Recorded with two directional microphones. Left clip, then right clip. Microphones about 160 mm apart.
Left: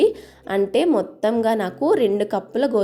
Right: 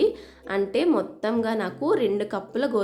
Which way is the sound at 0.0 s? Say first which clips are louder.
Left 5 dB; 30° left (ahead or behind).